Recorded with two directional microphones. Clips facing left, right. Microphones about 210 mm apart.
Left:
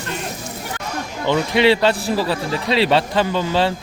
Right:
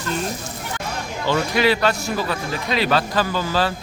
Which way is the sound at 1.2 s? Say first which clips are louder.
Left 3 dB; 20° left (ahead or behind).